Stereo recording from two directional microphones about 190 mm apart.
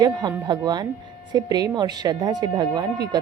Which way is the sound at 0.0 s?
20° right (ahead or behind).